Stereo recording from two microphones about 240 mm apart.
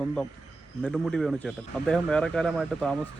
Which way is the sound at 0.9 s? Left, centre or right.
Centre.